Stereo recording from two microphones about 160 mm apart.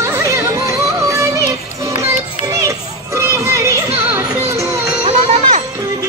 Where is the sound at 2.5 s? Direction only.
20° right (ahead or behind).